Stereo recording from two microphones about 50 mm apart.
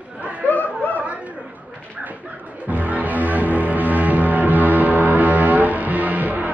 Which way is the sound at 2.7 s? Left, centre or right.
Right.